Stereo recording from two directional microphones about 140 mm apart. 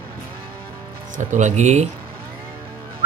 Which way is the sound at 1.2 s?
60° right (ahead or behind).